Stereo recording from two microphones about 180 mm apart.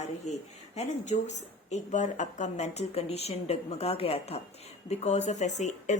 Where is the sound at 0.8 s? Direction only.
40° left (ahead or behind).